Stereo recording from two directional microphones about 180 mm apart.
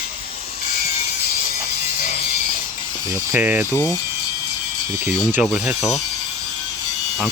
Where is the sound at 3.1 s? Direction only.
10° right (ahead or behind).